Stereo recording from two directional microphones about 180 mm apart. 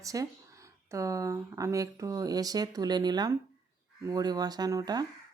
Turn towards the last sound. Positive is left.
turn(degrees=-20)  # may be behind; listen again after turning